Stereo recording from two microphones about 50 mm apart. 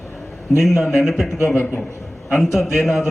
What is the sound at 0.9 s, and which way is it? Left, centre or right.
Speech, centre.